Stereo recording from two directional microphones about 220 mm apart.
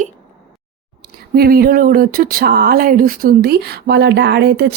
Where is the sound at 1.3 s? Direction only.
45° right (ahead or behind).